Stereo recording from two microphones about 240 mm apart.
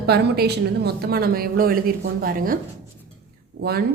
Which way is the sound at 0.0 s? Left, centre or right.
Right.